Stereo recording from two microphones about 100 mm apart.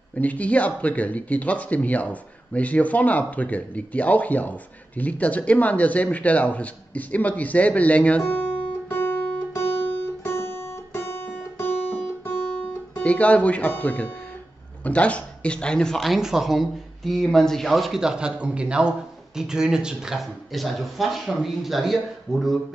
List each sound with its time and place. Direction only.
0.1 s speech: 15° left (ahead or behind)
8.8 s guitar: 20° left (ahead or behind)
14.8 s a man's voice: 15° left (ahead or behind)